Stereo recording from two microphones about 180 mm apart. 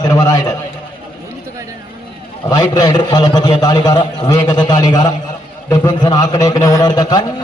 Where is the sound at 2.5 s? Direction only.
20° left (ahead or behind).